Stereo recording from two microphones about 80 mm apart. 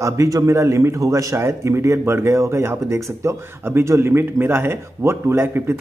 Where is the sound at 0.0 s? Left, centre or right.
Right.